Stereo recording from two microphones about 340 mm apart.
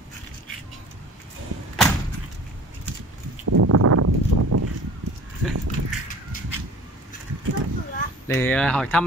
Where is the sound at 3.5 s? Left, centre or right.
Right.